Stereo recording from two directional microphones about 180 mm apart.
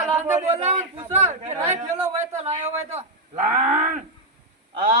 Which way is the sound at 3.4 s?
45° right (ahead or behind).